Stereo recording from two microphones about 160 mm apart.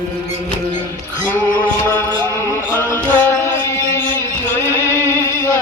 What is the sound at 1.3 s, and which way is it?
Music, 15° left (ahead or behind).